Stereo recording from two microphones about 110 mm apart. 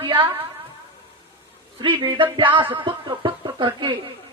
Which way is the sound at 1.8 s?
50° right (ahead or behind).